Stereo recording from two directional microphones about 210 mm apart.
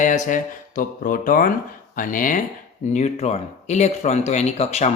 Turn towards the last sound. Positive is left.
turn(degrees=30)  # may be behind; listen again after turning